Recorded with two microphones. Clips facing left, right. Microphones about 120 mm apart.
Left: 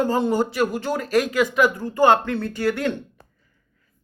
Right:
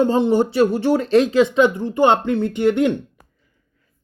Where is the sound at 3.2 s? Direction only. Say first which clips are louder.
Left 1 dB; 10° right (ahead or behind).